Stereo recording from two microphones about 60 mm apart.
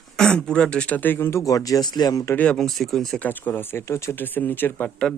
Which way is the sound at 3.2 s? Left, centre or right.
Left.